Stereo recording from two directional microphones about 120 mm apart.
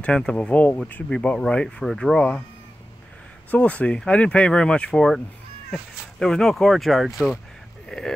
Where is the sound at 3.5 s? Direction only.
10° left (ahead or behind).